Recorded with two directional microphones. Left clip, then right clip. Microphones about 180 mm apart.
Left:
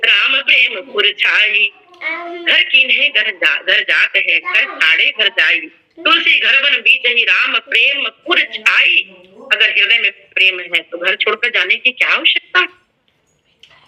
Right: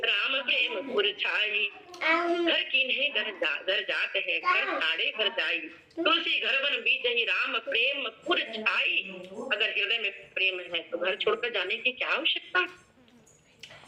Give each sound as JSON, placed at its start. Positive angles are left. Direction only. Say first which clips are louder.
{"t": 0.0, "sound": "a man's voice", "louder": "left 15 dB", "side_deg": 45}
{"t": 1.9, "sound": "child singing", "louder": "left 5 dB", "side_deg": 25}
{"t": 2.4, "sound": "a man's voice", "louder": "left 15 dB", "side_deg": 50}